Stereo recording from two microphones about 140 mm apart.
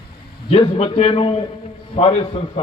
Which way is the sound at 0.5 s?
45° left (ahead or behind).